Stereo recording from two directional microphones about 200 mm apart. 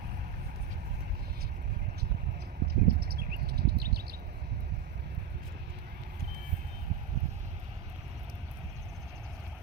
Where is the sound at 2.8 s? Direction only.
50° right (ahead or behind).